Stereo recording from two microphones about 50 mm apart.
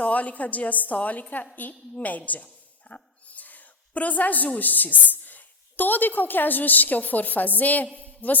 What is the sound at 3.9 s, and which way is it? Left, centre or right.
A woman's voice, left.